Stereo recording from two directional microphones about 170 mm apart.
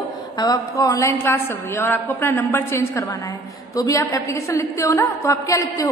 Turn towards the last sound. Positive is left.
turn(degrees=20)  # may be behind; listen again after turning